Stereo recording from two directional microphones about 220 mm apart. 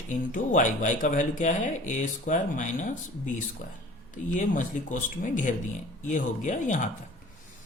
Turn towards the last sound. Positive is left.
turn(degrees=35)  # may be behind; listen again after turning